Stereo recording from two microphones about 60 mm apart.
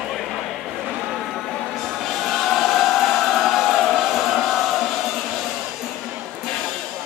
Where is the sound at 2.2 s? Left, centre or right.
Centre.